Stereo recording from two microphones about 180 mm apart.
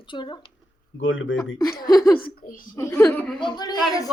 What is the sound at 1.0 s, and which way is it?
Speech, 90° left.